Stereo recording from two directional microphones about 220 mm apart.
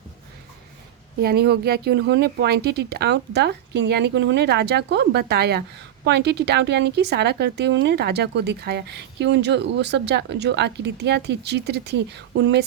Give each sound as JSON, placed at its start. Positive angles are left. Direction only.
{"t": 1.2, "sound": "a woman's voice", "side_deg": -45}